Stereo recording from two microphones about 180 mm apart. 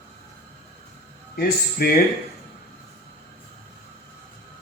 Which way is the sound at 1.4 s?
55° left (ahead or behind).